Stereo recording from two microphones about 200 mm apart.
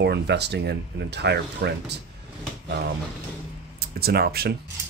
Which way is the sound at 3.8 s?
50° right (ahead or behind).